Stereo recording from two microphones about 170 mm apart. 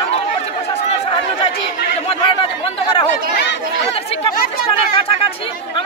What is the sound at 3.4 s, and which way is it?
Chatter, 90° left.